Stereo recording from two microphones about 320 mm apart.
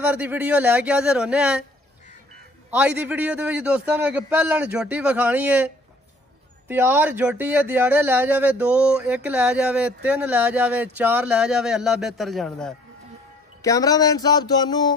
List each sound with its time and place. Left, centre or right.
0.1 s speech: centre
2.8 s speech: centre
6.7 s speech: centre